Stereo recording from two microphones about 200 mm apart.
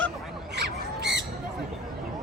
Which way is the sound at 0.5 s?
55° right (ahead or behind).